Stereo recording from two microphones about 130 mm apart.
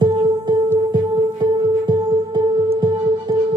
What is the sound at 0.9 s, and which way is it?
Music, 35° right (ahead or behind).